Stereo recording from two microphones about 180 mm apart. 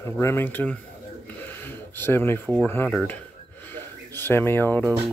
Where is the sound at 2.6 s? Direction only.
10° left (ahead or behind).